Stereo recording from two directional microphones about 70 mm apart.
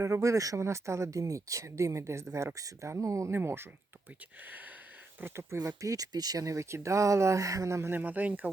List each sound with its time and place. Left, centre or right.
0.0 s speech: right
5.2 s speech: right
5.5 s speech: right
7.9 s speech: right